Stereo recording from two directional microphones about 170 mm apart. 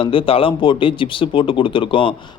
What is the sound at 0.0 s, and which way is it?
Speech, 30° left (ahead or behind).